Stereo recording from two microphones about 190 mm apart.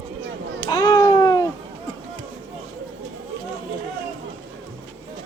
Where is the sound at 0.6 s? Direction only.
20° left (ahead or behind).